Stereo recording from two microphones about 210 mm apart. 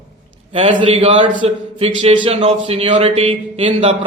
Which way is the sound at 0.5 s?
25° right (ahead or behind).